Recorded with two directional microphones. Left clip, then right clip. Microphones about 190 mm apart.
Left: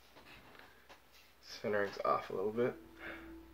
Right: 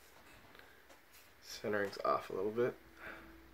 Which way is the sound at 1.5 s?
45° right (ahead or behind).